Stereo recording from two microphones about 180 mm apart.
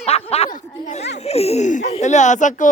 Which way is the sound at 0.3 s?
35° left (ahead or behind).